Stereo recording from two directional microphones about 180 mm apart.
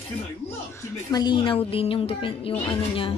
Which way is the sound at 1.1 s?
25° left (ahead or behind).